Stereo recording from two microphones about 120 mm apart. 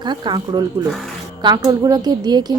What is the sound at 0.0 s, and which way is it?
A woman's voice, 40° right (ahead or behind).